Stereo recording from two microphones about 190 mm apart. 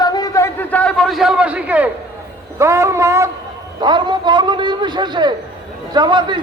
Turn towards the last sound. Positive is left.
turn(degrees=-25)  # may be behind; listen again after turning